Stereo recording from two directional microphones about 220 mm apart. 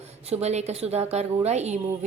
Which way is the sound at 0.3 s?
30° right (ahead or behind).